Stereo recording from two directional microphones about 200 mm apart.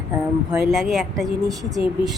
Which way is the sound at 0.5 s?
Centre (ahead or behind).